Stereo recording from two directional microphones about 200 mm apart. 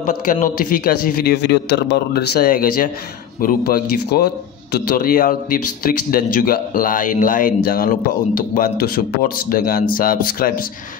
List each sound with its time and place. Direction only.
0.0 s speech: 40° left (ahead or behind)